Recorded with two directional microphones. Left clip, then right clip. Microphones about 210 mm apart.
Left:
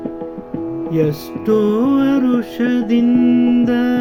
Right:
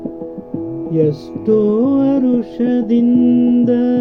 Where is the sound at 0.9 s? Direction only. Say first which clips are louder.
Right 3 dB; 20° left (ahead or behind).